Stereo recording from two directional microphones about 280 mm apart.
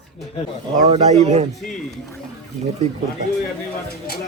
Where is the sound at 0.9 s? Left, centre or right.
Right.